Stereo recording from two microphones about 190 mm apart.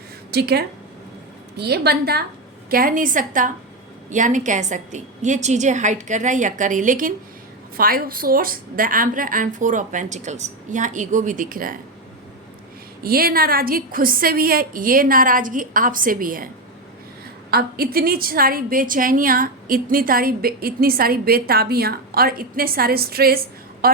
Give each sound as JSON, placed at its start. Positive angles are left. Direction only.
{"t": 0.3, "sound": "a woman's voice", "side_deg": -60}
{"t": 13.0, "sound": "a woman's voice", "side_deg": -50}
{"t": 17.5, "sound": "a woman's voice", "side_deg": -50}
{"t": 23.8, "sound": "a sound", "side_deg": -50}